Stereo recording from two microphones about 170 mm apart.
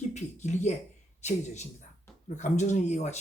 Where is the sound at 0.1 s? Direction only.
45° left (ahead or behind).